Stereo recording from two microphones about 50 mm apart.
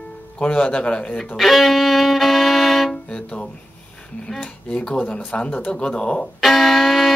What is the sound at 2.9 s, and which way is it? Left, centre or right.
Speech, centre.